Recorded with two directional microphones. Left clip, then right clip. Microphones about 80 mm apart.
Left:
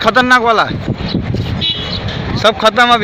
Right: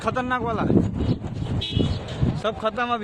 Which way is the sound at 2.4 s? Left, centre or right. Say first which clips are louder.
Left 16 dB; left.